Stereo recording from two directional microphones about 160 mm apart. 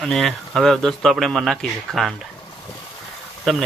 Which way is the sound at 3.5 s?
Centre (ahead or behind).